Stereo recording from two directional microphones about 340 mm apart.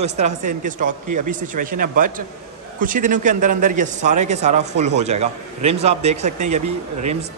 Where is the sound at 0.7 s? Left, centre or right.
Right.